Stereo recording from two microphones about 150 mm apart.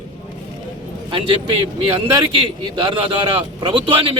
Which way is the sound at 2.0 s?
30° right (ahead or behind).